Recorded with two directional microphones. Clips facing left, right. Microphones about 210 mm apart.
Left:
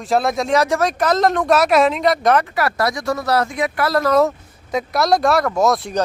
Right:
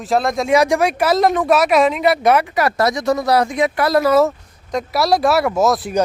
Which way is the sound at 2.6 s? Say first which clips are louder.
Right 3 dB; 20° right (ahead or behind).